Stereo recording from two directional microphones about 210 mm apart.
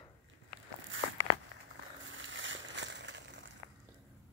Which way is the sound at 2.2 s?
65° right (ahead or behind).